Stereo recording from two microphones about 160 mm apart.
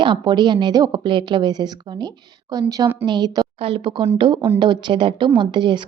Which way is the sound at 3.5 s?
35° right (ahead or behind).